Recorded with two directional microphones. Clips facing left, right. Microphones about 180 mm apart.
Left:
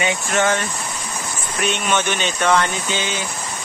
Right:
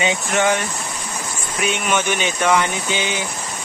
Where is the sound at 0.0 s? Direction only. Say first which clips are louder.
Right 1 dB; 20° right (ahead or behind).